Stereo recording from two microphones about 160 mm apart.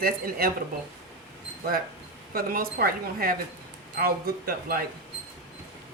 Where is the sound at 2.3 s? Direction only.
65° right (ahead or behind).